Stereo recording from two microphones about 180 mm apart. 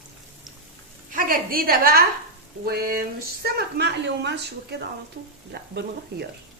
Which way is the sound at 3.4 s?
65° right (ahead or behind).